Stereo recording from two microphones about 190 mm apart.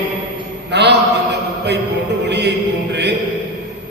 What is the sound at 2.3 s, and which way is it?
Chant, 65° right (ahead or behind).